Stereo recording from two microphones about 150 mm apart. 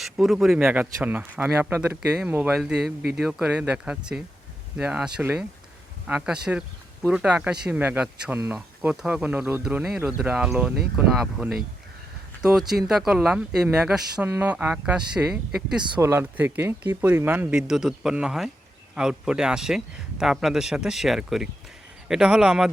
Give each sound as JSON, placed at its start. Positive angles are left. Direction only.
{"t": 0.0, "sound": "speech", "side_deg": 0}
{"t": 0.6, "sound": "a man's voice", "side_deg": -15}
{"t": 16.0, "sound": "a man's voice", "side_deg": -15}